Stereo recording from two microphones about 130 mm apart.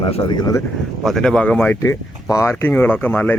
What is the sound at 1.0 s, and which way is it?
Speech, 5° left (ahead or behind).